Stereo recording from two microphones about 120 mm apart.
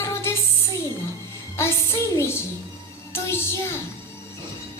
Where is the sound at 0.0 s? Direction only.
20° left (ahead or behind).